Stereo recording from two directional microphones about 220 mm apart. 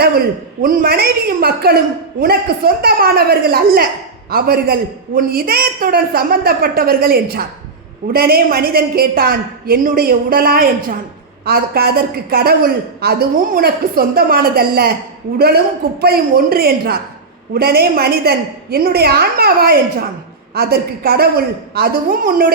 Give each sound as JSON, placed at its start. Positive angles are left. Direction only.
{"t": 0.6, "sound": "a man's voice", "side_deg": -45}